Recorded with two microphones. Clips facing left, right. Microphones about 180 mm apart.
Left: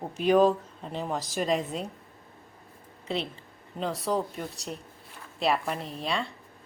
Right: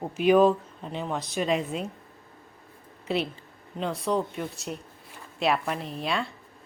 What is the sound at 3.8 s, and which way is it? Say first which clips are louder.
A woman's voice: right 1 dB; centre (ahead or behind).